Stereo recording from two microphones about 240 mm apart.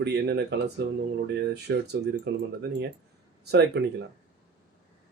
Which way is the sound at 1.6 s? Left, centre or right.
Right.